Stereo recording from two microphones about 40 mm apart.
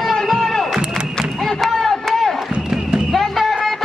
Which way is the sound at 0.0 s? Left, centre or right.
Centre.